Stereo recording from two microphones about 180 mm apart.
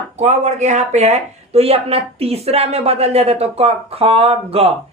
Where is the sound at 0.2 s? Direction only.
40° right (ahead or behind).